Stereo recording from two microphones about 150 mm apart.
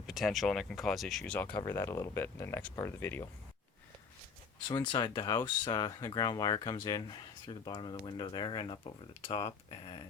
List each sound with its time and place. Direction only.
0.1 s speech: centre (ahead or behind); by 3.2 s 15° left (ahead or behind)
4.7 s speech: 30° left (ahead or behind)